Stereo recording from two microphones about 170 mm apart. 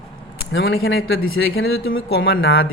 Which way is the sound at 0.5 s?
65° left (ahead or behind).